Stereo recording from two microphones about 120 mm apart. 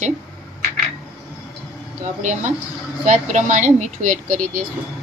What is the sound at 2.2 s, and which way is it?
Speech, 85° right.